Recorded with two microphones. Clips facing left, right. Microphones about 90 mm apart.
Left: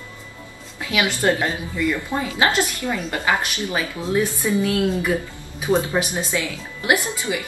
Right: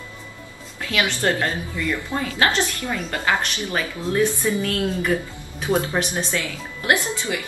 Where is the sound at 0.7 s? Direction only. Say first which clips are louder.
Left 1 dB; 15° left (ahead or behind).